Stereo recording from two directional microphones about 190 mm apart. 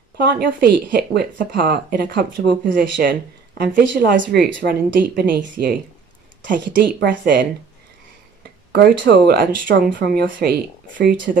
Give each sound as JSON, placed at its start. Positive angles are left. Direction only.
{"t": 0.2, "sound": "speech", "side_deg": -60}
{"t": 4.2, "sound": "speech", "side_deg": -65}
{"t": 8.7, "sound": "speech", "side_deg": -60}